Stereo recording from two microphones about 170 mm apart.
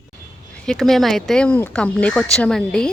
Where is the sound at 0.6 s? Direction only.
5° left (ahead or behind).